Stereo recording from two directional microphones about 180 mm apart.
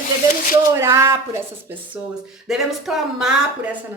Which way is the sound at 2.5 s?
Centre (ahead or behind).